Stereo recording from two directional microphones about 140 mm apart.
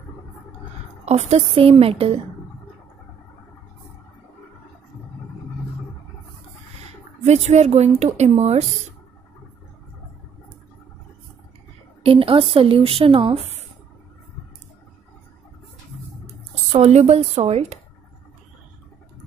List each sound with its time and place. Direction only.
1.0 s a woman's voice: 50° right (ahead or behind)
7.2 s a woman's voice: 55° right (ahead or behind)
12.0 s speech: 40° right (ahead or behind)
16.7 s a woman's voice: 50° right (ahead or behind)